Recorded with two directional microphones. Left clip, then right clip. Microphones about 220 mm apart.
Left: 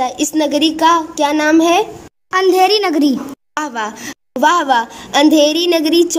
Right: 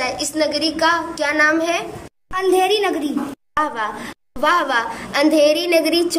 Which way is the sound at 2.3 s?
45° left (ahead or behind).